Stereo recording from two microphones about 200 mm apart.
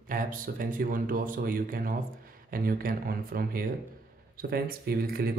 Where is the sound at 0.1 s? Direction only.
45° right (ahead or behind).